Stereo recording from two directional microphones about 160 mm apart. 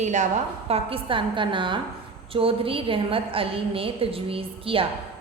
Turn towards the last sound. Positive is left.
turn(degrees=-35)  # may be behind; listen again after turning